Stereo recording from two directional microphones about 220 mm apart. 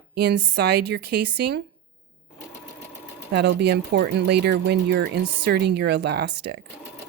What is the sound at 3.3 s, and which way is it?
Speech, 50° right (ahead or behind).